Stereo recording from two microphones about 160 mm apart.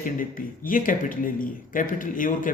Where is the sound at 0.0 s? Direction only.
60° left (ahead or behind).